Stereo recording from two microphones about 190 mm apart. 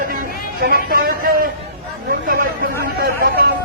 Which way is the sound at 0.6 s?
50° right (ahead or behind).